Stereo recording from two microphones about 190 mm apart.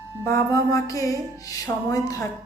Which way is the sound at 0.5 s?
15° left (ahead or behind).